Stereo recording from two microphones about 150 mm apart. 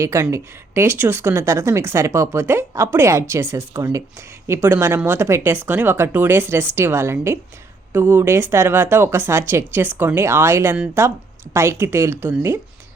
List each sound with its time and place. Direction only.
0.0 s speech: 20° right (ahead or behind)